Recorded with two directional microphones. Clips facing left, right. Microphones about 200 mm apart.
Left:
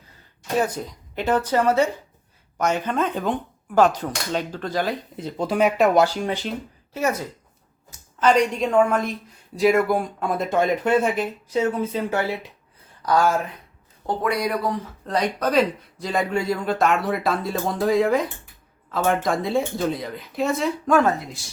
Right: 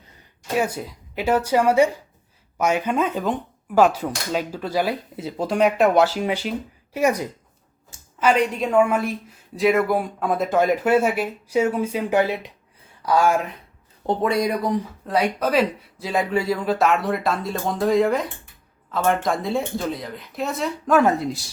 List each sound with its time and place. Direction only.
0.5 s speech: 10° right (ahead or behind)
14.1 s a man's voice: 25° right (ahead or behind)
15.0 s speech: 5° right (ahead or behind)